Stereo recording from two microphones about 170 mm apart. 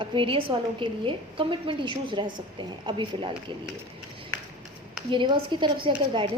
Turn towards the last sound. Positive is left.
turn(degrees=-30)  # may be behind; listen again after turning